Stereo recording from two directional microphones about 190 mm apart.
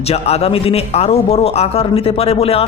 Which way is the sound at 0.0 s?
35° left (ahead or behind).